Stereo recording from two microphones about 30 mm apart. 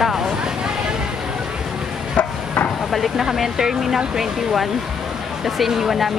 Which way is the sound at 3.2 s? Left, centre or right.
Centre.